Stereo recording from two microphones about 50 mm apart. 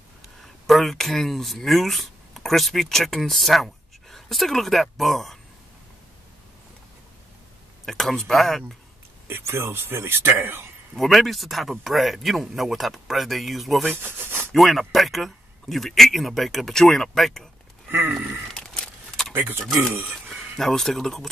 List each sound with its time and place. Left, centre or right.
0.7 s speech: centre
7.8 s speech: centre
9.3 s a man's voice: right
11.0 s speech: centre
14.0 s rub: right
14.5 s speech: centre
18.5 s a sound: centre
19.3 s speech: right
20.2 s speech: centre